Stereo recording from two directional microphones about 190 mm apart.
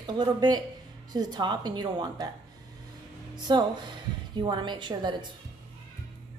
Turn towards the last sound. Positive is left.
turn(degrees=-25)  # may be behind; listen again after turning